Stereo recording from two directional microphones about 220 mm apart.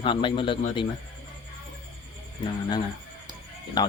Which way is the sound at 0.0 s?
20° left (ahead or behind).